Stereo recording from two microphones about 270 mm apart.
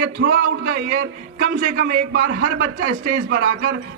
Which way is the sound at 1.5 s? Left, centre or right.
Right.